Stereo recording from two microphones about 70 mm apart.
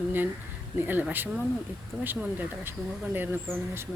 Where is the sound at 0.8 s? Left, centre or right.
Right.